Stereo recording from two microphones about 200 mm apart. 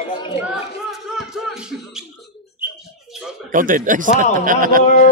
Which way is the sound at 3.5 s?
40° right (ahead or behind).